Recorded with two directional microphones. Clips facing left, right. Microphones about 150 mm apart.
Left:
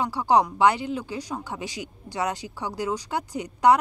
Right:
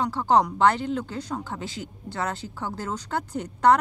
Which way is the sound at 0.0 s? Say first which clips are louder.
Even; 10° left (ahead or behind).